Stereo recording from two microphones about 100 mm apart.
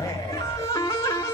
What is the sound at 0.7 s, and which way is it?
Music, 30° left (ahead or behind).